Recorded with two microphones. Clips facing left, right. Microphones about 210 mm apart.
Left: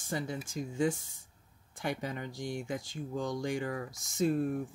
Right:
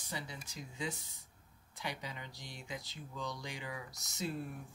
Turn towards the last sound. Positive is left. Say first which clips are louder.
# left 11 dB
turn(degrees=50)  # may be behind; listen again after turning